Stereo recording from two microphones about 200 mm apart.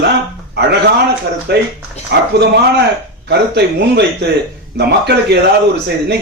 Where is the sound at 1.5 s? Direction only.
55° right (ahead or behind).